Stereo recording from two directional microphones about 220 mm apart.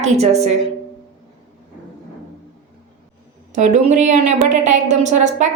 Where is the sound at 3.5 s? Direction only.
35° right (ahead or behind).